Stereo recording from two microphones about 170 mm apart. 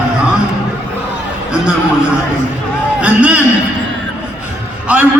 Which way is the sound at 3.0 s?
10° right (ahead or behind).